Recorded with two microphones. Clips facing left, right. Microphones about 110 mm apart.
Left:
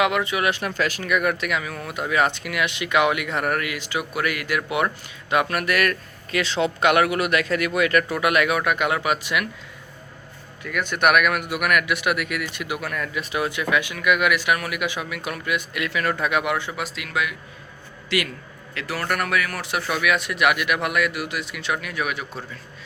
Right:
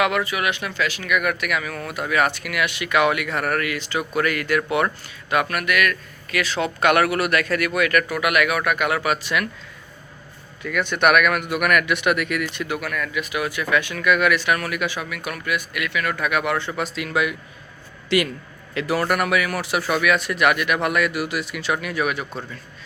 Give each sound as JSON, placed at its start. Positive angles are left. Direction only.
{"t": 0.0, "sound": "speech", "side_deg": 20}
{"t": 0.5, "sound": "speech", "side_deg": 40}
{"t": 5.3, "sound": "speech", "side_deg": 25}
{"t": 10.7, "sound": "a man's voice", "side_deg": 15}
{"t": 12.6, "sound": "speech", "side_deg": 20}
{"t": 18.7, "sound": "a man's voice", "side_deg": -20}